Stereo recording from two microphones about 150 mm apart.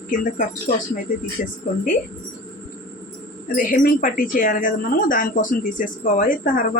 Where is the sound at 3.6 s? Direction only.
65° left (ahead or behind).